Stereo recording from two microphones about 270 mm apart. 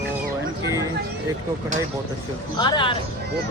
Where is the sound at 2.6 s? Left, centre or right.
Centre.